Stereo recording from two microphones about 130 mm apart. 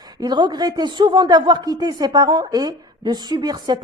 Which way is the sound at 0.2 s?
35° right (ahead or behind).